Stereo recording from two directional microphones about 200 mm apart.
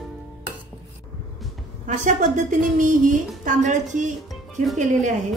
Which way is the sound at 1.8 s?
40° right (ahead or behind).